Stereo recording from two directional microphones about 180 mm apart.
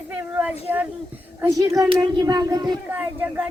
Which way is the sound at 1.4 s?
20° right (ahead or behind).